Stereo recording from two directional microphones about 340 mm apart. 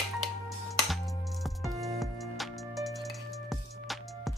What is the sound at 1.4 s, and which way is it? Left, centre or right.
Music, centre.